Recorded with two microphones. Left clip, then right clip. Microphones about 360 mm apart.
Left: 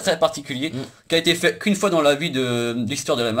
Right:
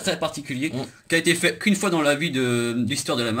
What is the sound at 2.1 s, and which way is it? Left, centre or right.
Speech, left.